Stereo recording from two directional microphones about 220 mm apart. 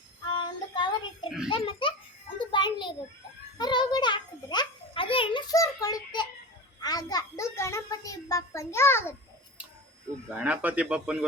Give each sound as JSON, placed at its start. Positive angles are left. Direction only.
{"t": 0.3, "sound": "child singing", "side_deg": 20}
{"t": 1.5, "sound": "a child's voice", "side_deg": 25}
{"t": 2.5, "sound": "a sound", "side_deg": 20}
{"t": 3.6, "sound": "music", "side_deg": 20}
{"t": 6.8, "sound": "a sound", "side_deg": 15}
{"t": 10.3, "sound": "speech", "side_deg": -5}